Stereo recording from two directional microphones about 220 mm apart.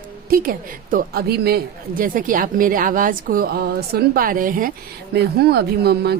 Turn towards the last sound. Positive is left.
turn(degrees=-45)  # may be behind; listen again after turning